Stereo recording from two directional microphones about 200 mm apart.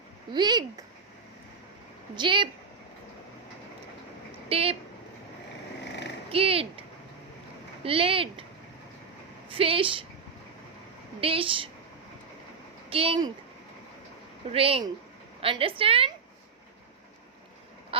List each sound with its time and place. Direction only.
0.3 s a woman's voice: 20° right (ahead or behind)
2.1 s a woman's voice: 25° right (ahead or behind)
4.4 s speech: 30° right (ahead or behind)
6.3 s a woman's voice: 30° right (ahead or behind)
7.9 s a woman's voice: 25° right (ahead or behind)
9.5 s a woman's voice: 30° right (ahead or behind)
11.2 s a woman's voice: 25° right (ahead or behind)
12.9 s a woman's voice: 25° right (ahead or behind)
14.5 s a woman's voice: 30° right (ahead or behind)